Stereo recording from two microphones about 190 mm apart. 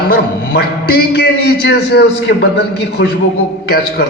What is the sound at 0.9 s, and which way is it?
A man's voice, 65° left (ahead or behind).